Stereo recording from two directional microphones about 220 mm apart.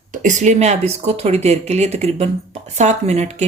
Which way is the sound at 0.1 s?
35° right (ahead or behind).